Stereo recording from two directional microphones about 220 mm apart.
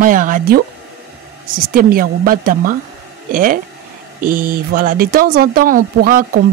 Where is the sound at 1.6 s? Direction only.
40° right (ahead or behind).